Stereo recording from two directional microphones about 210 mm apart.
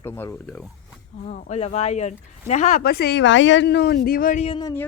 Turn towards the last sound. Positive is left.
turn(degrees=20)  # may be behind; listen again after turning